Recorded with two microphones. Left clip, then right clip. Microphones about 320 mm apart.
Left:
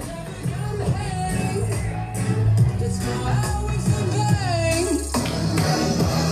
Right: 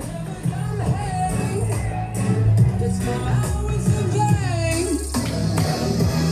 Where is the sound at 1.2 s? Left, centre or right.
Centre.